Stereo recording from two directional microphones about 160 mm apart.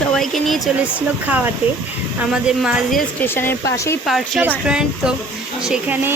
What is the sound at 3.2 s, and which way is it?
Speech, 15° left (ahead or behind).